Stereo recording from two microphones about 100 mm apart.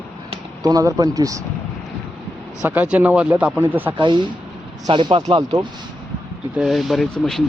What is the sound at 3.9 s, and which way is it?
Speech, 50° right (ahead or behind).